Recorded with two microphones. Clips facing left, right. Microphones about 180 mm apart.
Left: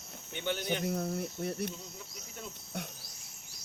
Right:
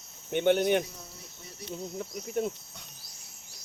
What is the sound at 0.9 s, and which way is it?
Cricket, 60° left (ahead or behind).